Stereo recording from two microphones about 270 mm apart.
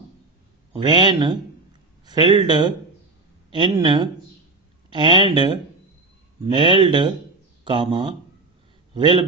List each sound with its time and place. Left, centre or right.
0.8 s speech: centre